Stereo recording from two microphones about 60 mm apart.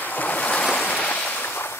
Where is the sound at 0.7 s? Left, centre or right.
Left.